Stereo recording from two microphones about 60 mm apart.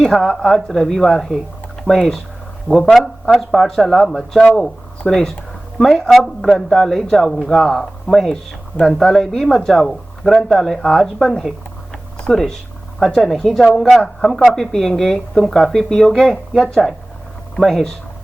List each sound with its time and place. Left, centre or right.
0.0 s speech: centre